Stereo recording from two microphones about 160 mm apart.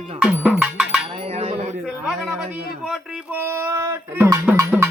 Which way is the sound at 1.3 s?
40° right (ahead or behind).